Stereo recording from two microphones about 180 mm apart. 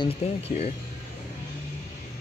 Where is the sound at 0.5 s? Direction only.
40° left (ahead or behind).